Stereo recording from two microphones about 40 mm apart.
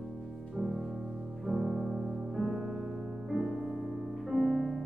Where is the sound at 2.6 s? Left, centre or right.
Centre.